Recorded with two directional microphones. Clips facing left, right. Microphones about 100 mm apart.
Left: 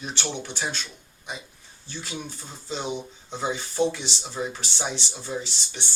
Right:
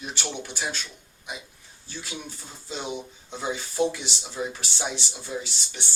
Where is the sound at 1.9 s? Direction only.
5° right (ahead or behind).